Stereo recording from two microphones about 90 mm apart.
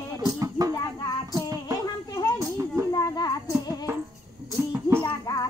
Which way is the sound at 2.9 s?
40° left (ahead or behind).